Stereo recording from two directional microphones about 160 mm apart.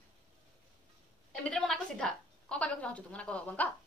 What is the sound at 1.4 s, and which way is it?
A woman's voice, 5° left (ahead or behind).